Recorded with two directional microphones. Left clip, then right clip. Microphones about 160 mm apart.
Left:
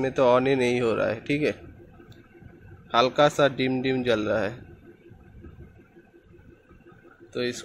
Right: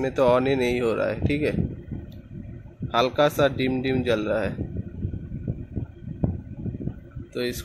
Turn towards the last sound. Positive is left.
turn(degrees=0)  # may be behind; listen again after turning